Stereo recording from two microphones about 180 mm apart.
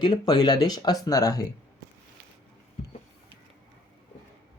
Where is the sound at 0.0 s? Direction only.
25° left (ahead or behind).